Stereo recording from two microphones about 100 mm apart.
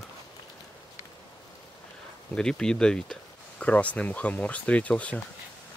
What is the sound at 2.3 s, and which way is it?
Speech, 5° left (ahead or behind).